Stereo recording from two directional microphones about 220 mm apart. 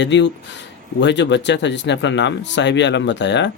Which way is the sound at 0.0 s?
55° left (ahead or behind).